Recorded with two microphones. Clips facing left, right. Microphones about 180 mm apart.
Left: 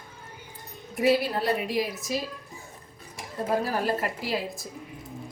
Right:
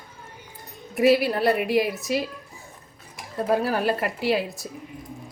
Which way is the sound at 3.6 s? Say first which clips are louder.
Right 3 dB; 70° right (ahead or behind).